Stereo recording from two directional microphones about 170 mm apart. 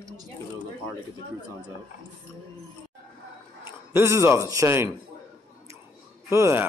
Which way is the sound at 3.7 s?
15° right (ahead or behind).